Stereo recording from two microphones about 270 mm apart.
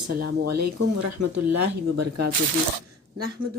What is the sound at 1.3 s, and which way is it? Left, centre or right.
Speech, right.